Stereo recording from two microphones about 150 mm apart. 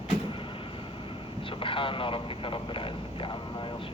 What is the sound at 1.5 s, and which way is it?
Speech, 35° left (ahead or behind).